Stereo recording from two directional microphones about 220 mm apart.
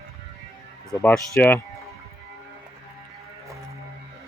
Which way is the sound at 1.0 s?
5° left (ahead or behind).